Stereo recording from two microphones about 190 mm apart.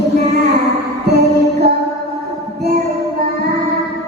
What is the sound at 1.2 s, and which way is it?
Music, 55° right (ahead or behind).